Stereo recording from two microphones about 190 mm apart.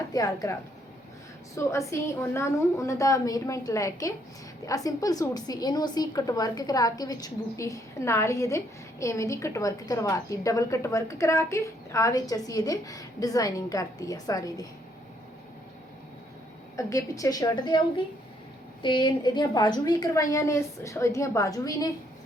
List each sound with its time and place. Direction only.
0.1 s speech: 20° left (ahead or behind)
1.5 s a woman's voice: 15° left (ahead or behind)
16.7 s a woman's voice: 15° left (ahead or behind)